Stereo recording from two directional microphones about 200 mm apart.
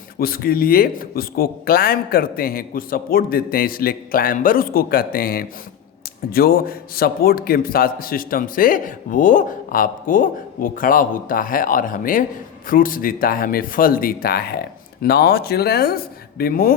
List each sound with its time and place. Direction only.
0.2 s a man's voice: 50° left (ahead or behind)